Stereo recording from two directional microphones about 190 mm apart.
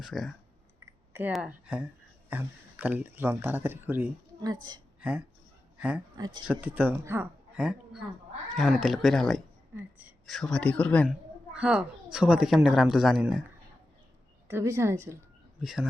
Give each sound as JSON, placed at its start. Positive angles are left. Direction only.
{"t": 0.0, "sound": "speech", "side_deg": 0}
{"t": 5.7, "sound": "a sound", "side_deg": -5}
{"t": 6.1, "sound": "speech", "side_deg": -20}
{"t": 6.5, "sound": "speech", "side_deg": -10}
{"t": 11.1, "sound": "a sound", "side_deg": -5}
{"t": 12.1, "sound": "speech", "side_deg": -5}
{"t": 14.4, "sound": "speech", "side_deg": -15}
{"t": 15.6, "sound": "speech", "side_deg": 0}